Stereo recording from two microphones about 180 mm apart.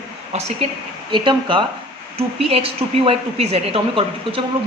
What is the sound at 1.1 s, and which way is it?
A woman's voice, 25° right (ahead or behind).